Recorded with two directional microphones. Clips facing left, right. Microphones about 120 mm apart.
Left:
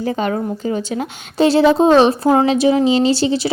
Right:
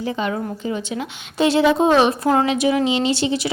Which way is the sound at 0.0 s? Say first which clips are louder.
Left 4 dB; 45° left (ahead or behind).